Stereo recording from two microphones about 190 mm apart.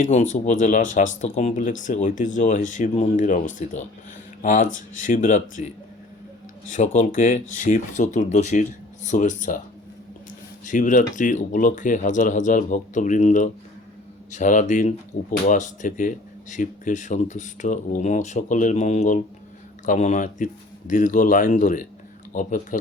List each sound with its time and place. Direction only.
0.0 s speech: 40° left (ahead or behind)
6.7 s speech: 40° left (ahead or behind)
10.7 s speech: 40° left (ahead or behind)